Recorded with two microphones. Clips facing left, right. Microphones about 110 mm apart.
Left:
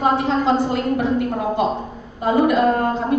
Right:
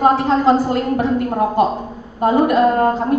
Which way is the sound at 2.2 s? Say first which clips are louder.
Right 3 dB; 45° right (ahead or behind).